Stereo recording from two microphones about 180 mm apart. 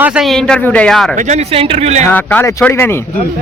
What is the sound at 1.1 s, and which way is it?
Speech, 40° right (ahead or behind).